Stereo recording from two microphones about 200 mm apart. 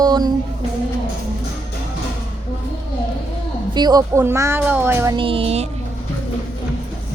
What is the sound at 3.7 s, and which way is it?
Speech, 20° right (ahead or behind).